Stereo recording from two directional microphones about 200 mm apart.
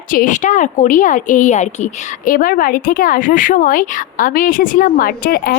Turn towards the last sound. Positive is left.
turn(degrees=45)  # may be behind; listen again after turning